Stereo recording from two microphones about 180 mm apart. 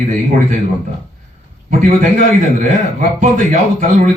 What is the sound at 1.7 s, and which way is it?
A man's voice, 45° right (ahead or behind).